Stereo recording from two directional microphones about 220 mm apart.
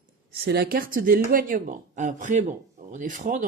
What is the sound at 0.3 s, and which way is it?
Speech, 45° right (ahead or behind).